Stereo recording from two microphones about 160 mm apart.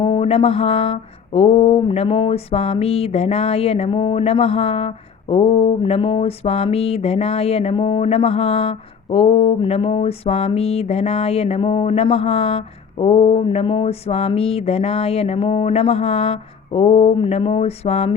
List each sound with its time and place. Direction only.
0.0 s mantra: 35° left (ahead or behind)